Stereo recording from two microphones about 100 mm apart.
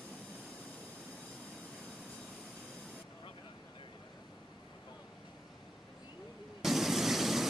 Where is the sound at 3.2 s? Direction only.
60° left (ahead or behind).